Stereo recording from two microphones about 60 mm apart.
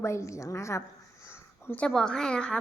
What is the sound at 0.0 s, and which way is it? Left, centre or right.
Speech, left.